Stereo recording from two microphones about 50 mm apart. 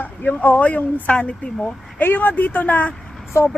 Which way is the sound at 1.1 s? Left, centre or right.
Left.